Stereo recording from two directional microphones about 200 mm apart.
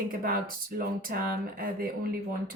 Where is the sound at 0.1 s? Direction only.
45° right (ahead or behind).